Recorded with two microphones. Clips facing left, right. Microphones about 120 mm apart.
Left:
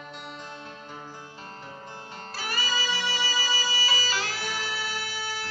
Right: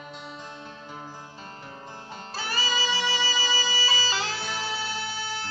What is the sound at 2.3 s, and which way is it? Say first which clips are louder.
Music: right 2 dB; 30° right (ahead or behind).